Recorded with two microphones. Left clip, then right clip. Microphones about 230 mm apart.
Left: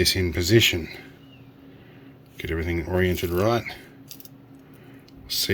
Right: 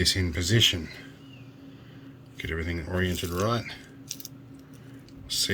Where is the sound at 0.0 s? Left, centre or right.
Left.